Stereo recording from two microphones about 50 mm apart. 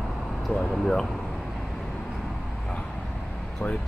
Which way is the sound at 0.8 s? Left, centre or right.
Centre.